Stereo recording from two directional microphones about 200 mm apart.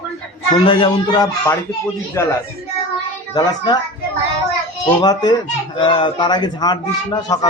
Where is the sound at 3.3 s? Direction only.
20° left (ahead or behind).